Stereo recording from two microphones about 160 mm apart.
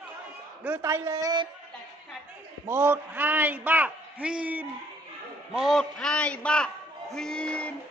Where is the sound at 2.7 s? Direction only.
15° right (ahead or behind).